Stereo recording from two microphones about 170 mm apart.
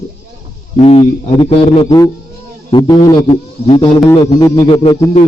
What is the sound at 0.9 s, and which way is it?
A man's voice, 35° left (ahead or behind).